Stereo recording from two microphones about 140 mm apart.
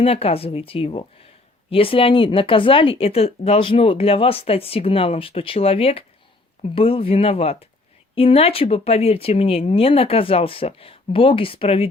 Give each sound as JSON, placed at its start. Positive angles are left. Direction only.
{"t": 0.0, "sound": "a woman's voice", "side_deg": 45}